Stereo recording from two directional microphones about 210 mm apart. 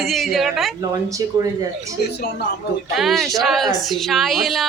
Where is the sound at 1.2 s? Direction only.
15° right (ahead or behind).